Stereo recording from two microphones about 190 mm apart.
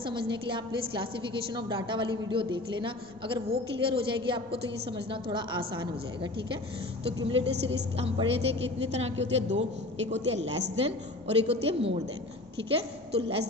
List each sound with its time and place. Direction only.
0.0 s a woman's voice: 25° right (ahead or behind)
7.2 s a woman's voice: 30° right (ahead or behind)
9.1 s a woman's voice: 70° right (ahead or behind)
10.1 s a woman's voice: 35° right (ahead or behind)